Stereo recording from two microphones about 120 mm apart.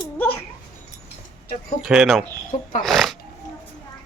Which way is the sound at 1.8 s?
5° right (ahead or behind).